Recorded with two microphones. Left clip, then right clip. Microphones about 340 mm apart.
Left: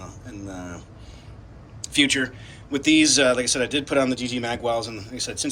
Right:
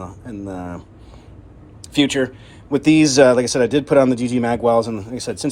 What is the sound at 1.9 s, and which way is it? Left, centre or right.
Speech, centre.